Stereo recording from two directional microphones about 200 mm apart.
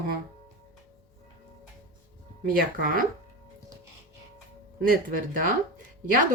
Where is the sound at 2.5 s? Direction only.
45° right (ahead or behind).